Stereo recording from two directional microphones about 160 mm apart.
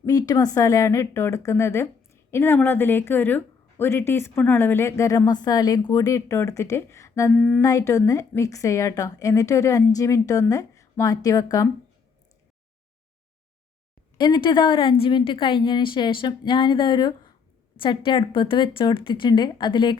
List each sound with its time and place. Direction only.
0.0 s a woman's voice: 25° left (ahead or behind)
7.3 s a sound: 5° left (ahead or behind)
7.6 s speech: 20° left (ahead or behind)
14.2 s speech: 25° left (ahead or behind)